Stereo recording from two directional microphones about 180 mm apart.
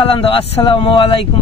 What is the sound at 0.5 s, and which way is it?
Speech, 30° left (ahead or behind).